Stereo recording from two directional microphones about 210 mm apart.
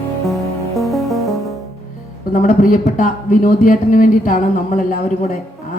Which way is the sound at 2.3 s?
35° left (ahead or behind).